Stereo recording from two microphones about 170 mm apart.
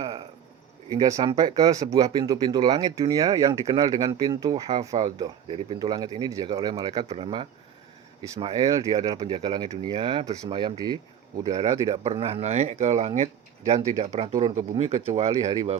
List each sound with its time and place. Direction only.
0.9 s speech: 20° right (ahead or behind)
12.0 s speech: 35° right (ahead or behind)